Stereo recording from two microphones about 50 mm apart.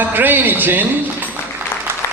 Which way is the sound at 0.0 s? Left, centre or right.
Right.